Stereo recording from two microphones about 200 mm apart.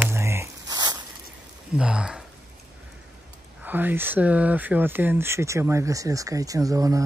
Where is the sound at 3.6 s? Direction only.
10° right (ahead or behind).